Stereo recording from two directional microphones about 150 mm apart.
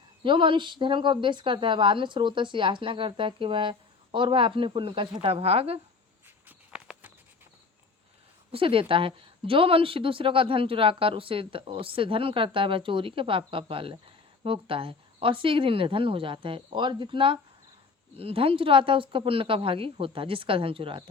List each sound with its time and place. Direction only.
0.2 s speech: 35° right (ahead or behind)
6.7 s a sound: 10° right (ahead or behind)
8.5 s speech: 35° right (ahead or behind)